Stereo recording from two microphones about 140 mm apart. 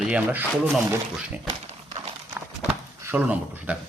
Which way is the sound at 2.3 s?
15° right (ahead or behind).